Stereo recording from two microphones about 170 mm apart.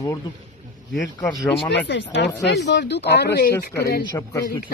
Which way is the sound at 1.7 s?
90° left.